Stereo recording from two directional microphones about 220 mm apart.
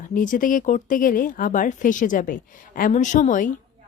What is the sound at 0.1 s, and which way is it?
Speech, 40° left (ahead or behind).